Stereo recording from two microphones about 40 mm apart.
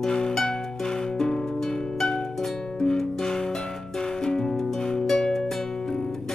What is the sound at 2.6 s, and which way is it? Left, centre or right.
Music, centre.